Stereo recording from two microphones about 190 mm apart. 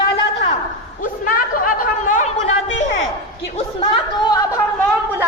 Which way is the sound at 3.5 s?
25° left (ahead or behind).